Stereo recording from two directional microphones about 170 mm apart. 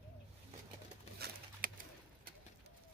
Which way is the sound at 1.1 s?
70° right (ahead or behind).